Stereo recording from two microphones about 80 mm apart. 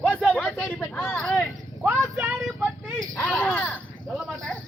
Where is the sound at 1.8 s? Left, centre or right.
Right.